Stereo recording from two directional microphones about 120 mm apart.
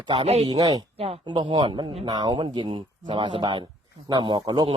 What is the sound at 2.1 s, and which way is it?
Speech, 35° right (ahead or behind).